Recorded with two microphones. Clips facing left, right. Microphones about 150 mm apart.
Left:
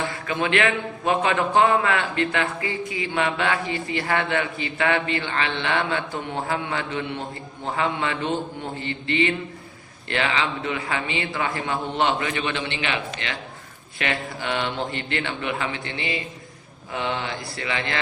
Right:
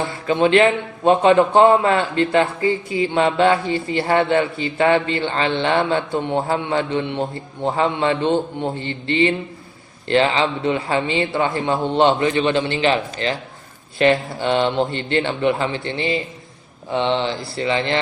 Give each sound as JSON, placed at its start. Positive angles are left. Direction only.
{"t": 0.3, "sound": "a man's voice", "side_deg": -30}